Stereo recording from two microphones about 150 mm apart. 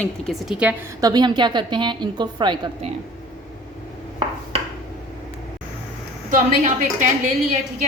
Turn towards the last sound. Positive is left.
turn(degrees=-55)  # may be behind; listen again after turning